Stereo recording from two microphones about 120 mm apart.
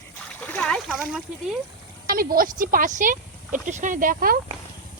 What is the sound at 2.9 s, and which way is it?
Speech, 90° right.